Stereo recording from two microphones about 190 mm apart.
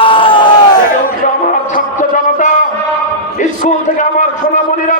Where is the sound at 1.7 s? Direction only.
40° left (ahead or behind).